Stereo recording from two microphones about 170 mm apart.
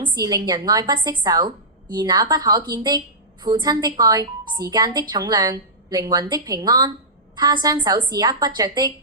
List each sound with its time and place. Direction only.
0.0 s a woman's voice: 20° right (ahead or behind)